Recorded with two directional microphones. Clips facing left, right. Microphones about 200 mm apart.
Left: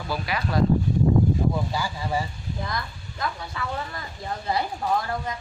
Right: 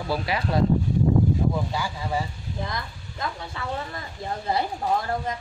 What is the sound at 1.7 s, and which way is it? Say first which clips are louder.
Speech: left 1 dB; centre (ahead or behind).